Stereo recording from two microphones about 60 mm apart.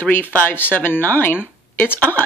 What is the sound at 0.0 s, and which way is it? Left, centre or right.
Speech, left.